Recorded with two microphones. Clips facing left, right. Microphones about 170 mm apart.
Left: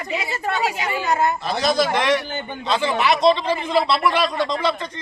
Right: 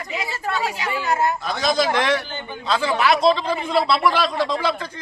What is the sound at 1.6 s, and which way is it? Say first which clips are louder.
Speech: even; centre (ahead or behind).